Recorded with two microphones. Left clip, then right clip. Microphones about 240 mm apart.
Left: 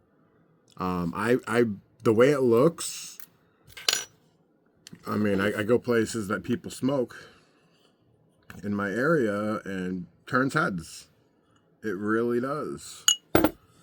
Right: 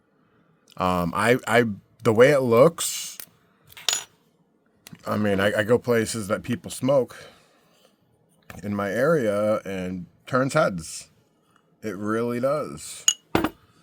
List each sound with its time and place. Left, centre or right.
0.7 s speech: right
4.8 s speech: right
8.4 s speech: right